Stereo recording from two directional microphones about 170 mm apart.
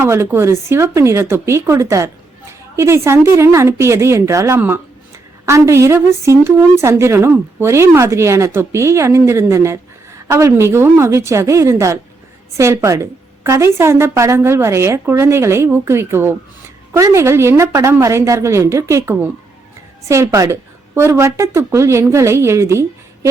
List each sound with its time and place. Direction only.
0.0 s a woman's voice: 15° right (ahead or behind)